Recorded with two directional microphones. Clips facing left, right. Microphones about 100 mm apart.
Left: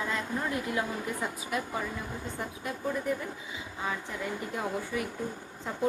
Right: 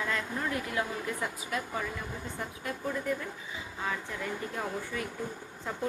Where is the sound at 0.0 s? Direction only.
20° left (ahead or behind).